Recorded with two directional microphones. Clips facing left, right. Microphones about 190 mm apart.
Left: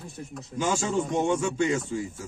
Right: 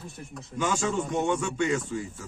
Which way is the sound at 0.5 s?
30° left (ahead or behind).